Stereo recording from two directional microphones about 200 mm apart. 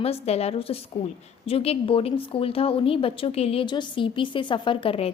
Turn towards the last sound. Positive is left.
turn(degrees=25)  # may be behind; listen again after turning